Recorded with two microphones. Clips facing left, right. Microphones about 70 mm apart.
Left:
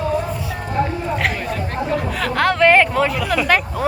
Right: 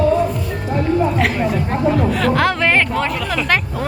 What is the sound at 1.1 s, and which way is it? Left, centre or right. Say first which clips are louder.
Speech: right 4 dB; centre.